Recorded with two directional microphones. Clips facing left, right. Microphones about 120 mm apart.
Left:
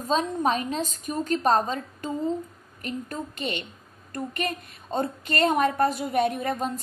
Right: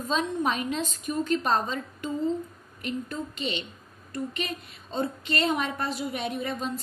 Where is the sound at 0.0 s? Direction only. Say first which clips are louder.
Left 3 dB; 40° left (ahead or behind).